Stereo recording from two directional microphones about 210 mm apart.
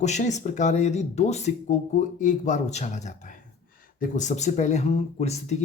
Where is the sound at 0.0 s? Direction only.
35° left (ahead or behind).